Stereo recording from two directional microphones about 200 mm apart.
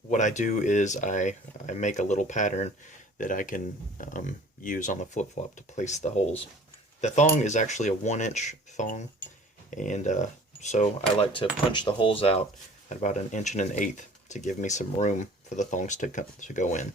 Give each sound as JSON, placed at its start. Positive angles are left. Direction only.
{"t": 0.1, "sound": "speech", "side_deg": 35}
{"t": 11.2, "sound": "speech", "side_deg": 25}